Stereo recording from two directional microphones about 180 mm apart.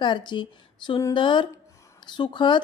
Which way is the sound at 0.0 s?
25° left (ahead or behind).